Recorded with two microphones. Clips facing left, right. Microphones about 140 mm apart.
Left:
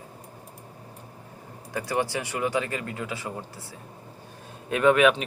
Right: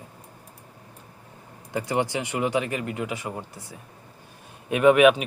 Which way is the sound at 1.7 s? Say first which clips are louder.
Right 2 dB; 20° right (ahead or behind).